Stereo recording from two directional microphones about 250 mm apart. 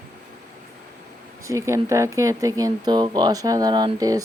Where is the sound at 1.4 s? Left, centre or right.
Centre.